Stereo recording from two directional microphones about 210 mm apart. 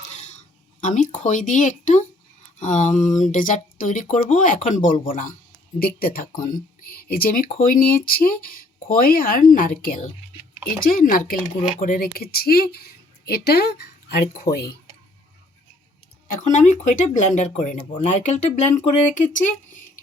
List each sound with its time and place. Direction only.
0.1 s a sound: 35° left (ahead or behind)
0.8 s speech: 35° left (ahead or behind)
16.3 s speech: 35° left (ahead or behind)